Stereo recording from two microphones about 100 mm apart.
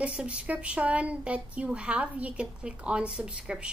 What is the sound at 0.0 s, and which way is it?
A woman's voice, 10° right (ahead or behind).